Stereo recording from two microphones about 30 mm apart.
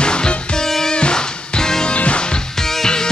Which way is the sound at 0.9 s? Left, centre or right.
Left.